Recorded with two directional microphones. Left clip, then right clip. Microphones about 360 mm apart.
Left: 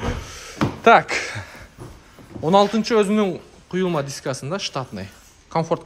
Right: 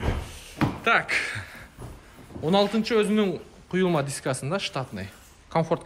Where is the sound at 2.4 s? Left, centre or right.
Centre.